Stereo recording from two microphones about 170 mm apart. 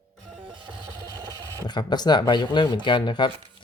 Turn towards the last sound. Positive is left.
turn(degrees=25)  # may be behind; listen again after turning